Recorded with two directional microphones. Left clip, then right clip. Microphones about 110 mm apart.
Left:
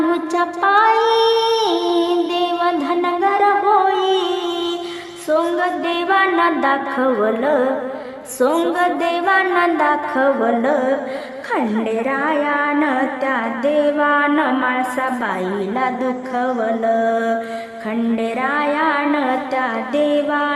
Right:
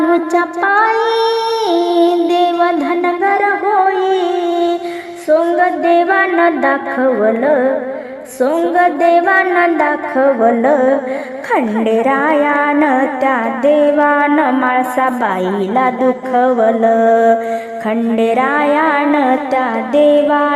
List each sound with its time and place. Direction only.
0.1 s child singing: 30° right (ahead or behind)
5.3 s music: 25° right (ahead or behind)
11.5 s music: 45° right (ahead or behind)
15.7 s mantra: 40° right (ahead or behind)
18.1 s music: 45° right (ahead or behind)